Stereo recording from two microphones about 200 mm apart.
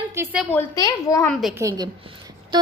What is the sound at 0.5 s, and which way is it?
Speech, 15° left (ahead or behind).